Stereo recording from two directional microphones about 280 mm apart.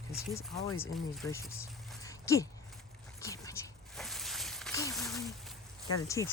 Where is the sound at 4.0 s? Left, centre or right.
Centre.